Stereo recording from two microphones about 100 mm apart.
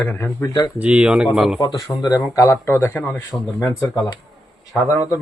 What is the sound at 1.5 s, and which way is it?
Speech, 40° left (ahead or behind).